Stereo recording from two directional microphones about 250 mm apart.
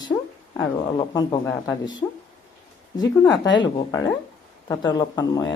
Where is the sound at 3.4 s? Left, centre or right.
Centre.